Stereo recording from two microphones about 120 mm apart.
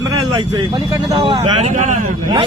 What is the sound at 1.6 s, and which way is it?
Speech, 90° right.